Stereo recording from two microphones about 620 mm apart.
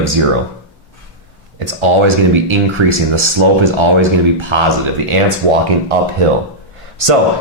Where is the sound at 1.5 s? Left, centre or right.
Right.